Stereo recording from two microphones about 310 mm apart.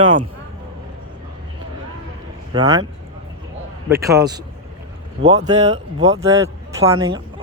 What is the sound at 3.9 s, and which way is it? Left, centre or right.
Speech, centre.